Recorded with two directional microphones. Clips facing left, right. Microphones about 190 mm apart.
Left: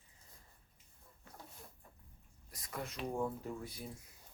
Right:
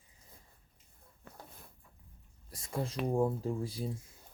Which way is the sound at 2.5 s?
30° right (ahead or behind).